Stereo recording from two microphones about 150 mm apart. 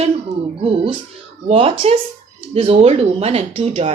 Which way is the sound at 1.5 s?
40° right (ahead or behind).